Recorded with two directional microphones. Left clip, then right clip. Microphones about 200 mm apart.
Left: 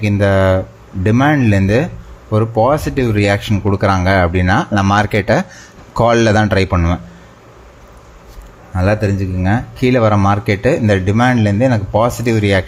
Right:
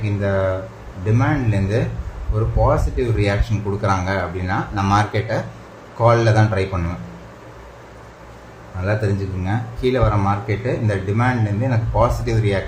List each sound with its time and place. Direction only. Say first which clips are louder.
0.0 s speech: left 7 dB; 50° left (ahead or behind)
8.8 s speech: left 6 dB; 45° left (ahead or behind)